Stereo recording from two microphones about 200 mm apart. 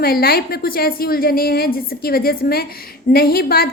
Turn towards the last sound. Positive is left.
turn(degrees=50)  # may be behind; listen again after turning